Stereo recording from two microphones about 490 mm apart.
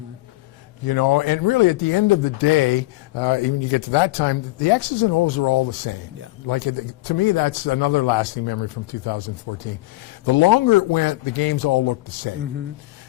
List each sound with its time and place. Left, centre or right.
0.9 s speech: left